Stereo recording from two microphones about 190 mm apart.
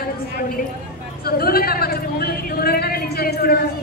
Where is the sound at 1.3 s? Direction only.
50° left (ahead or behind).